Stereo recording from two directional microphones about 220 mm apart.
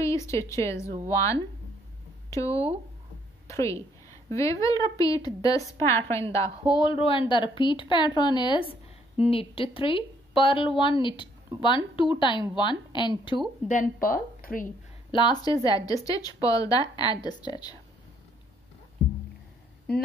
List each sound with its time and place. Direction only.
0.0 s a woman's voice: 15° left (ahead or behind)
13.7 s a woman's voice: 35° left (ahead or behind)
15.0 s speech: 20° left (ahead or behind)